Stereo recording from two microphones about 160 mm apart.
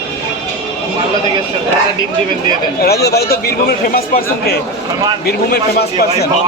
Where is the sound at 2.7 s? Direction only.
85° left.